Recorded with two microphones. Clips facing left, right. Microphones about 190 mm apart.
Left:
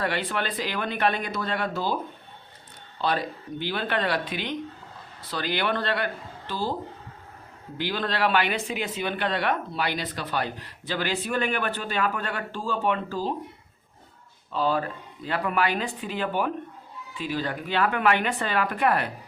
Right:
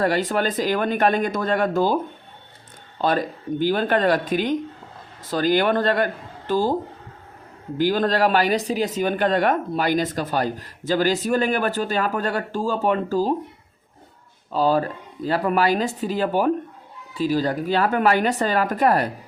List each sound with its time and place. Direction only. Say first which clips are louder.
0.0 s speech: right 7 dB; 40° right (ahead or behind)
3.0 s speech: right 5 dB; 45° right (ahead or behind)
7.8 s speech: right 8 dB; 45° right (ahead or behind)
14.5 s speech: right 6 dB; 40° right (ahead or behind)